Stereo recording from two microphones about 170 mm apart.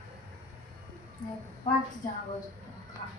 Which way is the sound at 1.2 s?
25° left (ahead or behind).